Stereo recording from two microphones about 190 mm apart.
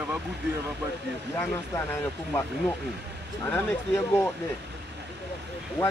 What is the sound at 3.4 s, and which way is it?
Speech, 10° left (ahead or behind).